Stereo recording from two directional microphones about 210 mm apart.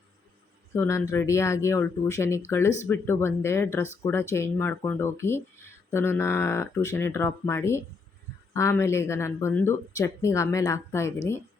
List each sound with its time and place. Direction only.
0.7 s speech: 15° left (ahead or behind)